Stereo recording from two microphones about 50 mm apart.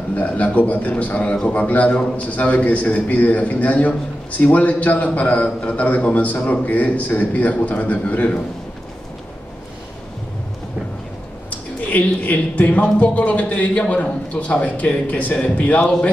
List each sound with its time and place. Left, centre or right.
0.1 s a man's voice: left
11.9 s a man's voice: left